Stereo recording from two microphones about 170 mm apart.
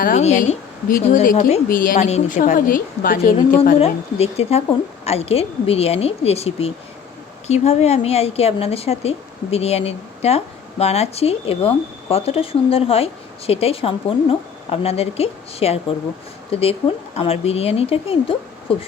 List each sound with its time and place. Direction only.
0.0 s speech: 45° left (ahead or behind)
1.6 s a woman's voice: 55° left (ahead or behind)
3.8 s a woman's voice: 35° left (ahead or behind)